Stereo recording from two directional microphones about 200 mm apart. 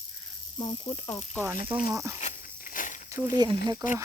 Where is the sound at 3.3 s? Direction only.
20° right (ahead or behind).